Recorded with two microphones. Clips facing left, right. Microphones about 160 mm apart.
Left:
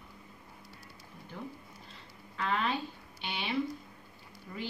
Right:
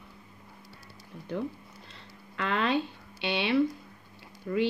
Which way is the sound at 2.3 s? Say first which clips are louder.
Right 5 dB; 80° right.